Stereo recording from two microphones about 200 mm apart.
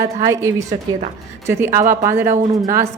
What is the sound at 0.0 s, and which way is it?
Speech, 15° right (ahead or behind).